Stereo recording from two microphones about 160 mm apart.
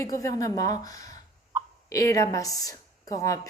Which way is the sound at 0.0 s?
20° left (ahead or behind).